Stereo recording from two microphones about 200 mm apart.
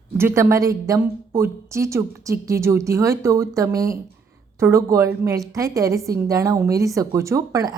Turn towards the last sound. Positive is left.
turn(degrees=-15)  # may be behind; listen again after turning